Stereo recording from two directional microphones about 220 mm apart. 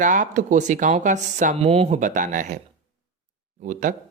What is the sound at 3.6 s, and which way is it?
Speech, 35° right (ahead or behind).